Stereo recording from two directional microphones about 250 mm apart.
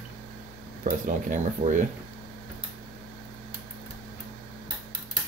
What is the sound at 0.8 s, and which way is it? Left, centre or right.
Speech, right.